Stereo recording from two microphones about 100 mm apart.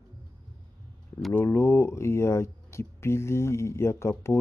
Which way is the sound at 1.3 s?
25° left (ahead or behind).